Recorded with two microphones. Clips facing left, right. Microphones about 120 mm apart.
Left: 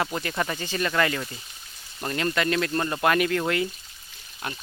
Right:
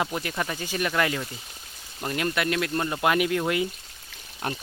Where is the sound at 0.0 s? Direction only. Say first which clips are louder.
Left 1 dB; 10° right (ahead or behind).